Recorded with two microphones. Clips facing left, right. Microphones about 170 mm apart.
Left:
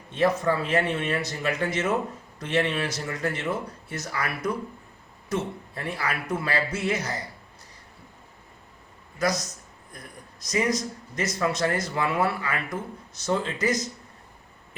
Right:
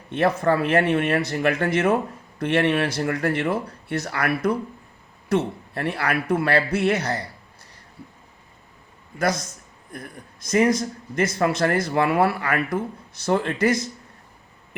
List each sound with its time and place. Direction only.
0.1 s speech: 65° right (ahead or behind)
10.4 s speech: 55° right (ahead or behind)